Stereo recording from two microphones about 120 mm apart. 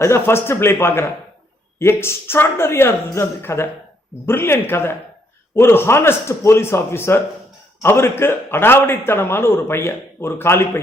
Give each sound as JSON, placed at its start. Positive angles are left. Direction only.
{"t": 0.0, "sound": "a man's voice", "side_deg": 20}